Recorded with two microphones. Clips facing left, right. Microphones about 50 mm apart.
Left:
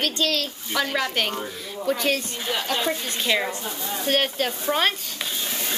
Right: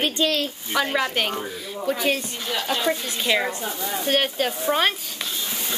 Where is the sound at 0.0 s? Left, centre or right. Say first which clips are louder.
Right 2 dB; centre.